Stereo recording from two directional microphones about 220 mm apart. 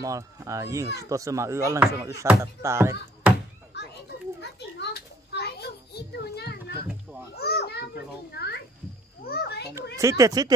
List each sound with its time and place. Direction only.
0.0 s speech: 15° right (ahead or behind)
3.7 s children playing: 50° left (ahead or behind)
7.3 s a child's voice: 45° left (ahead or behind)
9.9 s speech: 15° right (ahead or behind)